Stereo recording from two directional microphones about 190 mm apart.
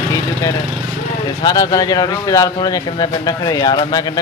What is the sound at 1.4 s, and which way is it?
Speech, 20° left (ahead or behind).